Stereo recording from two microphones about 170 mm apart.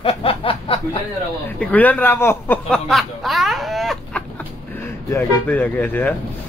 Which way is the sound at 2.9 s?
Centre (ahead or behind).